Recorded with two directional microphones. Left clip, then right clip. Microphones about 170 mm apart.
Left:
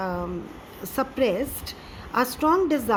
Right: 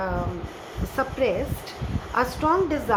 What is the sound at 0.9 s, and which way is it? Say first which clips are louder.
A woman's voice: even; 55° left (ahead or behind).